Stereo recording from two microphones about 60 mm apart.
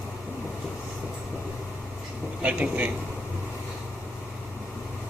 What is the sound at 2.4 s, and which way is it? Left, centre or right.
Speech, right.